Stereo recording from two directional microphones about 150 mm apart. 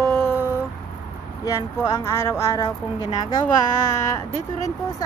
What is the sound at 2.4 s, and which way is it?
Speech, 25° left (ahead or behind).